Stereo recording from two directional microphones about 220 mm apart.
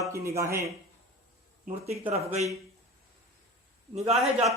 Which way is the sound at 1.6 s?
30° right (ahead or behind).